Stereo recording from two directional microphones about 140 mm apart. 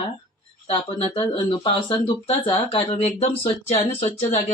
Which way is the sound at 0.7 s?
40° left (ahead or behind).